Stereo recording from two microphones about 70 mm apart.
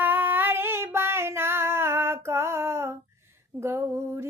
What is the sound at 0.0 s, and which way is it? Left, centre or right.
Female singing, right.